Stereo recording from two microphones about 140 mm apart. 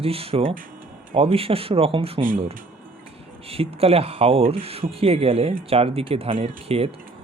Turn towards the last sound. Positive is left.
turn(degrees=-45)  # may be behind; listen again after turning